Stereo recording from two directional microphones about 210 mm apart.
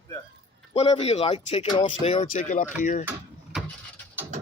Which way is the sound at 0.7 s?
30° left (ahead or behind).